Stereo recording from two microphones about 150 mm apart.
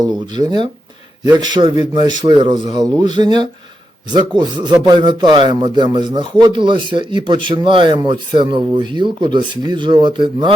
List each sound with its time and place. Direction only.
0.0 s a man's voice: 25° right (ahead or behind)
4.4 s rub: 30° right (ahead or behind)